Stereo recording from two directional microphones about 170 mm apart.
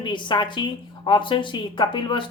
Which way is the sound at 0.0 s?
25° left (ahead or behind).